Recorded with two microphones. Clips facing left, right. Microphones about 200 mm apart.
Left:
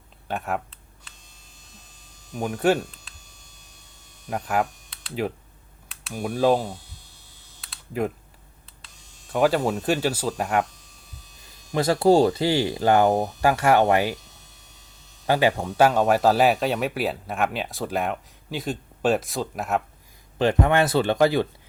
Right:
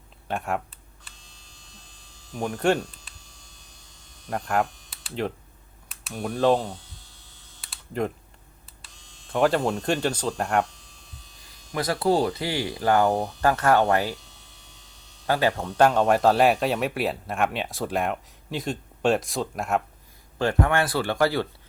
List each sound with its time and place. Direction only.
0.3 s speech: centre (ahead or behind)
2.3 s speech: 5° left (ahead or behind)
4.3 s speech: 5° left (ahead or behind)
7.6 s typing: centre (ahead or behind)
8.8 s speech: 5° left (ahead or behind)
11.7 s speech: 25° left (ahead or behind)
15.3 s speech: 15° left (ahead or behind)
20.4 s speech: 20° left (ahead or behind)